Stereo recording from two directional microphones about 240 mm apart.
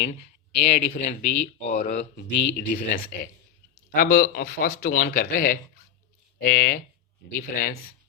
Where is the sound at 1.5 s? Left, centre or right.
Left.